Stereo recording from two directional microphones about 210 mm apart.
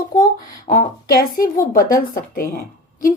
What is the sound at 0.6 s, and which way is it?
A woman's voice, 40° left (ahead or behind).